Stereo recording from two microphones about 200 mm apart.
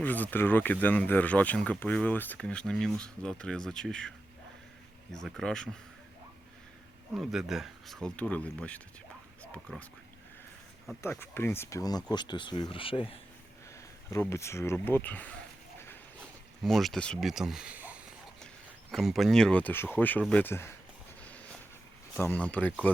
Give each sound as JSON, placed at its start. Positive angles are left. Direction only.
{"t": 0.0, "sound": "speech", "side_deg": 10}
{"t": 5.1, "sound": "speech", "side_deg": 5}
{"t": 7.1, "sound": "speech", "side_deg": 0}
{"t": 11.0, "sound": "speech", "side_deg": 10}
{"t": 14.1, "sound": "speech", "side_deg": 15}
{"t": 16.6, "sound": "speech", "side_deg": 0}
{"t": 21.2, "sound": "a sound", "side_deg": 5}
{"t": 22.1, "sound": "speech", "side_deg": 10}